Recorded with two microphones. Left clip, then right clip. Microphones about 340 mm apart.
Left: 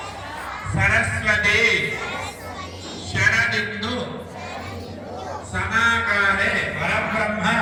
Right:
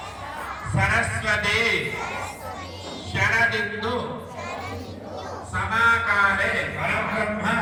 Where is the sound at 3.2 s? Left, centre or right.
Centre.